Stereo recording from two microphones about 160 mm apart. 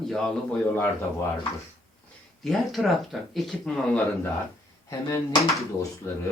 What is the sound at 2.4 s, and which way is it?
Speech, centre (ahead or behind).